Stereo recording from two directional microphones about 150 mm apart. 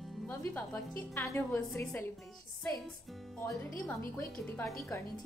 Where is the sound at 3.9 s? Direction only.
10° left (ahead or behind).